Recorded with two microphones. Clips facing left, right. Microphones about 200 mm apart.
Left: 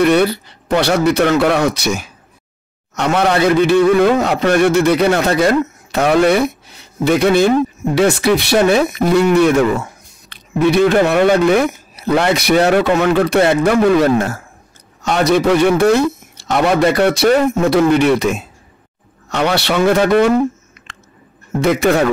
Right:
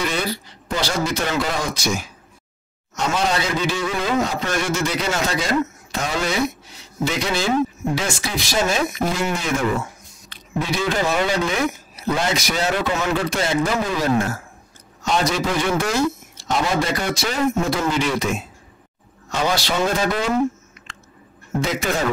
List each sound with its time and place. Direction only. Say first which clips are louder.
0.0 s a man's voice: left 12 dB; 60° left (ahead or behind)
21.5 s a man's voice: left 9 dB; 60° left (ahead or behind)